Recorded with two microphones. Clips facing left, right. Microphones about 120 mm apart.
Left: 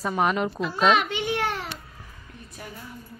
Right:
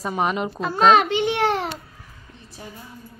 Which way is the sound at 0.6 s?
40° right (ahead or behind).